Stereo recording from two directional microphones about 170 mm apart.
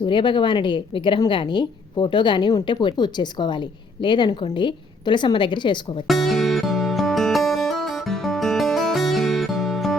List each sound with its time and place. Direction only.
0.0 s a woman's voice: 30° left (ahead or behind)
6.1 s music: centre (ahead or behind)